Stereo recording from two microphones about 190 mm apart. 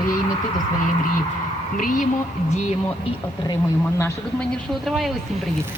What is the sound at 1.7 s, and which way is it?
Speech, 45° left (ahead or behind).